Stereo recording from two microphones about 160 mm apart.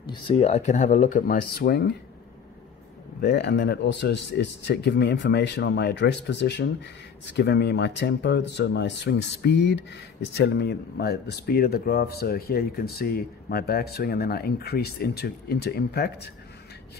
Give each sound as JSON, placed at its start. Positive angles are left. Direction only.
{"t": 0.0, "sound": "speech", "side_deg": 30}
{"t": 3.2, "sound": "speech", "side_deg": 90}